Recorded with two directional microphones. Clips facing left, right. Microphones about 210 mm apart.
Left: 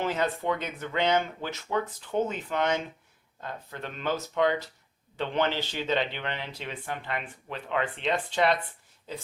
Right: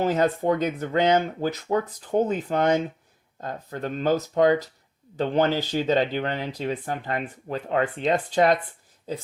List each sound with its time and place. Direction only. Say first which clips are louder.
0.0 s speech: right 6 dB; 40° right (ahead or behind)